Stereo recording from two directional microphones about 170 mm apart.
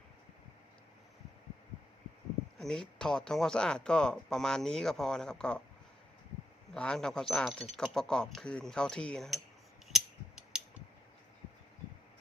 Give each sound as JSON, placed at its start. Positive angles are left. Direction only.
{"t": 2.6, "sound": "speech", "side_deg": 5}
{"t": 6.7, "sound": "speech", "side_deg": 5}